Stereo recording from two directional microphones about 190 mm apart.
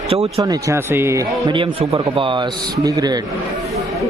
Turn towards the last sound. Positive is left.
turn(degrees=-20)  # may be behind; listen again after turning